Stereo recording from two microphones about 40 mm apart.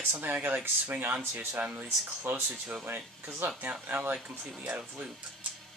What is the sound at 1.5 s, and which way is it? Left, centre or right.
Speech, right.